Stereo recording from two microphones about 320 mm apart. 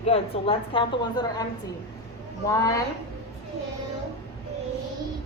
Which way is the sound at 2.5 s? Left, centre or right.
Centre.